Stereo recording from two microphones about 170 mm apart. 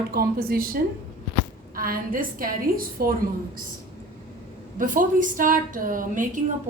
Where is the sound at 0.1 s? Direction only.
60° right (ahead or behind).